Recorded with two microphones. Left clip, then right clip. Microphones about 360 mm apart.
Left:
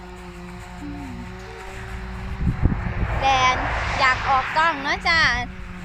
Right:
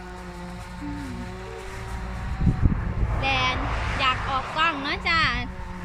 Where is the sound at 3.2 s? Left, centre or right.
Centre.